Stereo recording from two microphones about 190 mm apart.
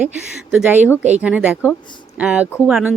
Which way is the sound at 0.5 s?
10° right (ahead or behind).